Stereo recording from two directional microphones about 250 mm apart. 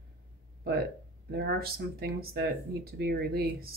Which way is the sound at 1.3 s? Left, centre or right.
Right.